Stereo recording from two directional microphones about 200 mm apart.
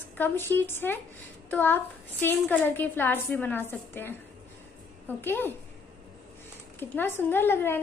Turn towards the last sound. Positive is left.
turn(degrees=10)  # may be behind; listen again after turning